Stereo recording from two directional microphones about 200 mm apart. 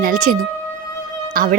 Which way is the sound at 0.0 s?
45° right (ahead or behind).